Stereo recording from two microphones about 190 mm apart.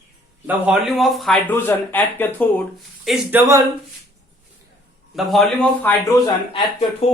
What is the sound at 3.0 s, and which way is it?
Speech, centre (ahead or behind).